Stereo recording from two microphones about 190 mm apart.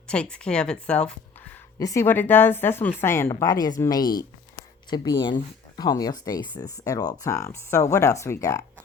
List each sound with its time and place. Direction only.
0.1 s speech: 5° left (ahead or behind)